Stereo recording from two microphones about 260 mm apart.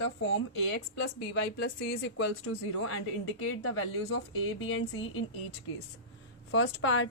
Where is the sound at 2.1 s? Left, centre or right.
Left.